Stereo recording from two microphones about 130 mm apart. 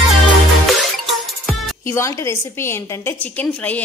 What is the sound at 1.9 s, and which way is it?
A woman's voice, 20° left (ahead or behind).